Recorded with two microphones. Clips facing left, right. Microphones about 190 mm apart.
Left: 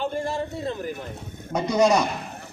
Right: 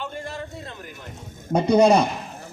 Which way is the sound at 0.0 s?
40° left (ahead or behind).